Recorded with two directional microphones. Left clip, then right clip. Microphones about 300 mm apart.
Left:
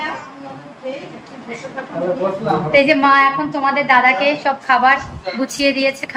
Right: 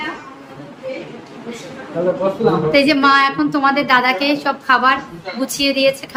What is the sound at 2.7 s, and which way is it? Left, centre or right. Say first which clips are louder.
A woman's voice: left 2 dB; centre.